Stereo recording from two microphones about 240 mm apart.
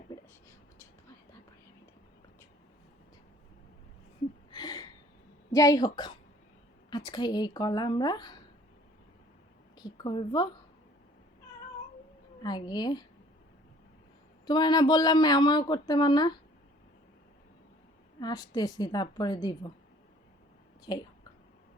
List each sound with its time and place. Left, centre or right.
0.1 s a sound: centre
4.5 s a sound: centre
5.5 s a woman's voice: centre
9.7 s a woman's voice: centre
12.4 s speech: centre
14.4 s speech: centre
18.2 s speech: centre
20.9 s speech: centre